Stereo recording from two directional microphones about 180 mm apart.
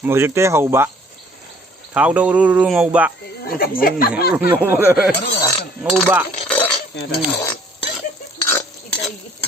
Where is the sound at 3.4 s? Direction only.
55° left (ahead or behind).